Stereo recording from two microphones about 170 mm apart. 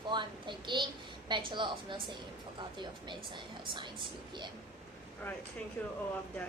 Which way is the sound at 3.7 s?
30° right (ahead or behind).